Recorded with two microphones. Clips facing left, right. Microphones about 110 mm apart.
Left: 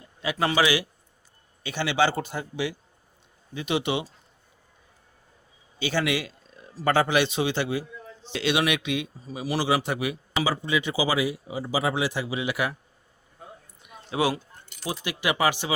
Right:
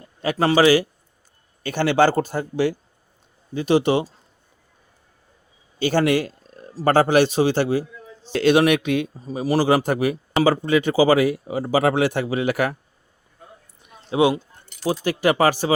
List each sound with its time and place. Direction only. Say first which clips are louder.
0.2 s a man's voice: right 7 dB; 40° right (ahead or behind)
5.8 s a man's voice: right 7 dB; 45° right (ahead or behind)
13.8 s a sound: right 7 dB; 25° right (ahead or behind)
15.2 s a man's voice: right 6 dB; 45° right (ahead or behind)